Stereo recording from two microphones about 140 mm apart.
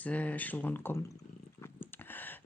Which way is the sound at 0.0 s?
10° left (ahead or behind).